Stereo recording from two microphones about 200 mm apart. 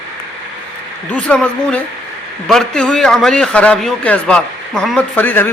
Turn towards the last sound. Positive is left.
turn(degrees=10)  # may be behind; listen again after turning